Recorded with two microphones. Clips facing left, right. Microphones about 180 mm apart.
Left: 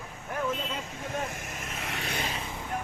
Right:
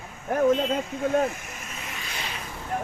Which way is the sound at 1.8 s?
70° left (ahead or behind).